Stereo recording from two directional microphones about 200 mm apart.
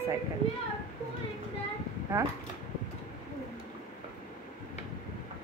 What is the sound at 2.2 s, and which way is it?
Speech, 15° right (ahead or behind).